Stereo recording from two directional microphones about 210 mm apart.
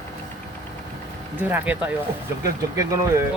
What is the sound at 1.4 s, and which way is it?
Speech, 10° right (ahead or behind).